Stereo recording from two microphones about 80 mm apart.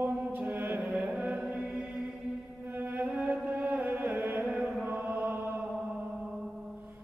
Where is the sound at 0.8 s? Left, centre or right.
Centre.